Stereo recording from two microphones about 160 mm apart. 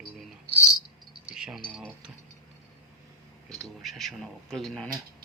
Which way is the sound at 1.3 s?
5° right (ahead or behind).